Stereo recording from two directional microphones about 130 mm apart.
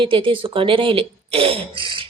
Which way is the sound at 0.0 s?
40° right (ahead or behind).